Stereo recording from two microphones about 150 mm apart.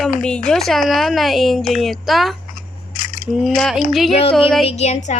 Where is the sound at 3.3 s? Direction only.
Centre (ahead or behind).